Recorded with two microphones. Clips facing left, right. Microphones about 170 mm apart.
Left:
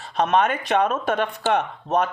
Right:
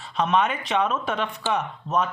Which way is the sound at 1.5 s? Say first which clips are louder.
Left 3 dB; 55° left (ahead or behind).